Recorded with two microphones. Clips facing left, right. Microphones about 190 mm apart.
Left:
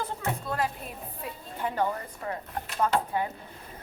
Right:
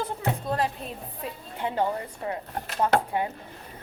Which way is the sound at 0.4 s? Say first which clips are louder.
Right 3 dB; 25° right (ahead or behind).